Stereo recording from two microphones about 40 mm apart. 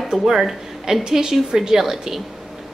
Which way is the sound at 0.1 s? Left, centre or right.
Centre.